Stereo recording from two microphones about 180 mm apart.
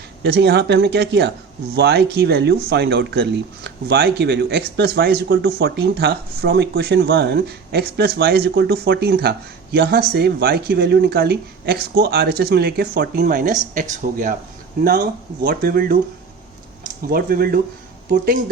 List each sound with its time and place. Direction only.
0.2 s speech: 65° right (ahead or behind); by 14.3 s 45° right (ahead or behind)
15.4 s speech: 55° right (ahead or behind)
17.1 s speech: 55° right (ahead or behind)